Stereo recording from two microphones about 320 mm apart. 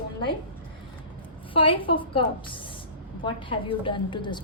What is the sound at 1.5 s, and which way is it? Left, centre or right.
A woman's voice, centre.